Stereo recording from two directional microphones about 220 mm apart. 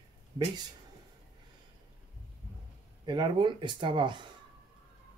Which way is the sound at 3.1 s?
20° right (ahead or behind).